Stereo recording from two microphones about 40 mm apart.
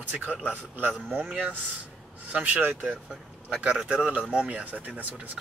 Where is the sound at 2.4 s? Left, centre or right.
Right.